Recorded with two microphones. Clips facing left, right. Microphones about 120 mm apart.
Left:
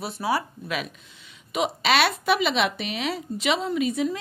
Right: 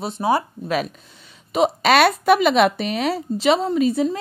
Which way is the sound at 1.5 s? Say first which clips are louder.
Right 6 dB; 40° right (ahead or behind).